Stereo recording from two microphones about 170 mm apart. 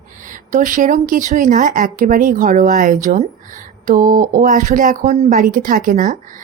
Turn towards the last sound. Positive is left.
turn(degrees=-55)  # may be behind; listen again after turning